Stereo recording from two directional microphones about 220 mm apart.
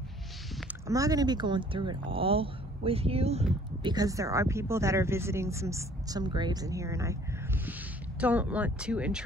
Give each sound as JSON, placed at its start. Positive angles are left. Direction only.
{"t": 0.8, "sound": "speech", "side_deg": -15}
{"t": 3.8, "sound": "speech", "side_deg": -15}